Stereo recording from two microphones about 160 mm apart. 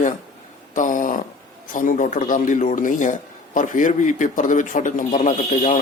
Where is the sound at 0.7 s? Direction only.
55° left (ahead or behind).